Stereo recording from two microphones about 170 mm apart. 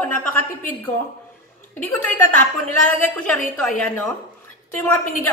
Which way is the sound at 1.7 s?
10° left (ahead or behind).